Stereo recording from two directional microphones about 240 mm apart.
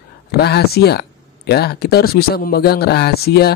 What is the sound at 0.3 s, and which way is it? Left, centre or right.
Speech, left.